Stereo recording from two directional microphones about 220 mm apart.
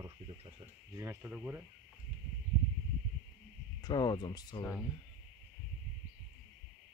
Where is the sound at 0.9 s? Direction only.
10° right (ahead or behind).